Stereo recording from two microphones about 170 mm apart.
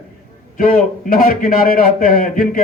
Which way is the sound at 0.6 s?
55° left (ahead or behind).